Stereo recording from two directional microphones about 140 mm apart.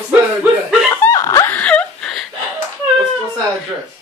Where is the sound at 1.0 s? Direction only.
20° left (ahead or behind).